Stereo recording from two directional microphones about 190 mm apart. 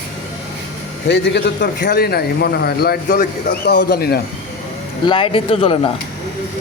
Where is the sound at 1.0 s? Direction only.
60° left (ahead or behind).